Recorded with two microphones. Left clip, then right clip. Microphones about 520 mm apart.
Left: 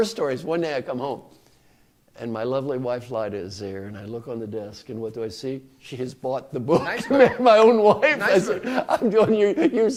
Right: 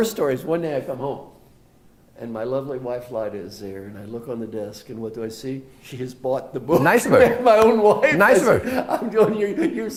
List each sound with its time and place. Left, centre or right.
0.0 s speech: left
2.1 s speech: left
6.8 s speech: right
7.2 s speech: left
8.6 s speech: left